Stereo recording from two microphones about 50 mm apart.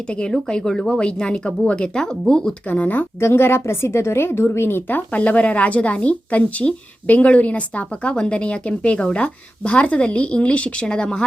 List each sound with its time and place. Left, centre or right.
0.1 s a woman's voice: centre
2.6 s speech: left
3.2 s a woman's voice: left
5.1 s a woman's voice: left